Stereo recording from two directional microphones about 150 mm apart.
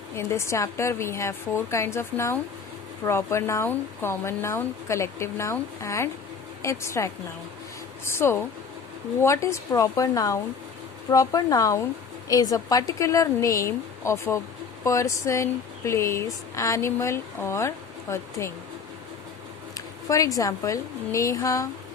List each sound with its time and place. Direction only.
0.2 s speech: 20° left (ahead or behind)
19.7 s speech: 20° left (ahead or behind)